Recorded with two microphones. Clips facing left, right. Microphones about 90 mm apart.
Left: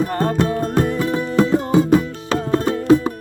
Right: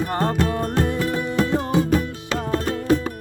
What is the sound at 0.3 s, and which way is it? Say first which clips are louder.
Music: left 3 dB; 25° left (ahead or behind).